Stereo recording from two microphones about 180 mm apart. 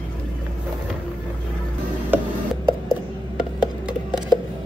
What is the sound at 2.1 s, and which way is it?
Mechanisms, 10° right (ahead or behind).